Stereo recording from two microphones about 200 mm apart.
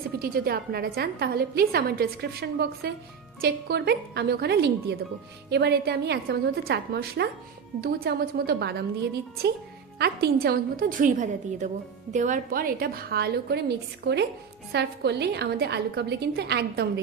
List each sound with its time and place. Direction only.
0.2 s a woman's voice: 50° right (ahead or behind)
10.0 s a woman's voice: 55° right (ahead or behind)